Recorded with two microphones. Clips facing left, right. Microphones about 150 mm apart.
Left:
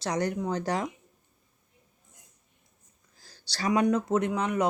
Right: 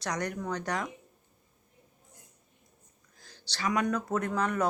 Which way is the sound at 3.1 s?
35° left (ahead or behind).